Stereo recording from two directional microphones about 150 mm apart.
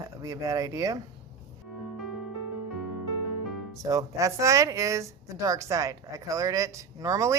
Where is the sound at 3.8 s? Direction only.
25° right (ahead or behind).